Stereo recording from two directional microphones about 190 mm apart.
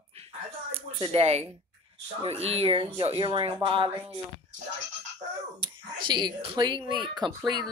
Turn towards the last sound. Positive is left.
turn(degrees=-20)  # may be behind; listen again after turning